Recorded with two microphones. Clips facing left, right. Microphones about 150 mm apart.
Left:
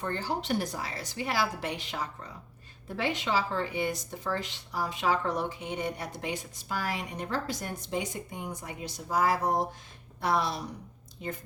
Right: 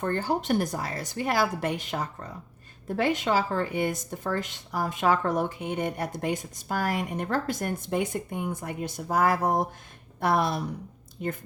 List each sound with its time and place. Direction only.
0.0 s a woman's voice: 50° right (ahead or behind)